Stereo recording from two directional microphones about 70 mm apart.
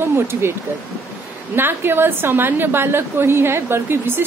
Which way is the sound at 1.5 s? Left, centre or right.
Right.